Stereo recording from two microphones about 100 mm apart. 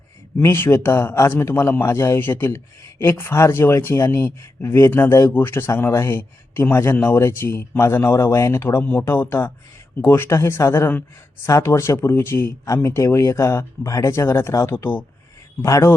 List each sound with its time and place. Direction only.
0.3 s speech: 20° left (ahead or behind)
8.8 s speech: 15° left (ahead or behind)